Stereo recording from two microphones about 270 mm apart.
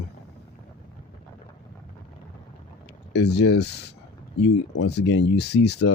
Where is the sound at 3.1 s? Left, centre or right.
Left.